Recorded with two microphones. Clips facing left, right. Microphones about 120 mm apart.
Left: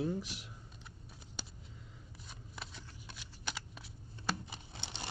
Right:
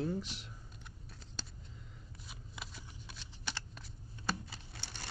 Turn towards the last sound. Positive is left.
turn(degrees=20)  # may be behind; listen again after turning